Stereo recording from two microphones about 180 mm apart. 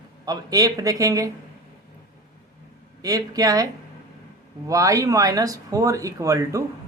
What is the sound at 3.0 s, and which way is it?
Speech, 20° right (ahead or behind).